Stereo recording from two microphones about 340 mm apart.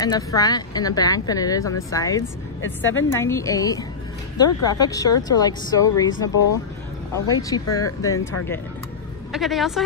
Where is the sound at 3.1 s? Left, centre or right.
Centre.